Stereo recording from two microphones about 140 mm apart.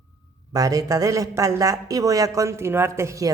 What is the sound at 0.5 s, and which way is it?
Speech, 25° right (ahead or behind).